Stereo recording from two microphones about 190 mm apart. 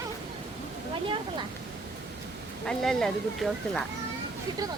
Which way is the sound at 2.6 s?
5° left (ahead or behind).